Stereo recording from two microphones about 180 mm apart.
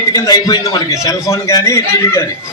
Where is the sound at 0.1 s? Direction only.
20° left (ahead or behind).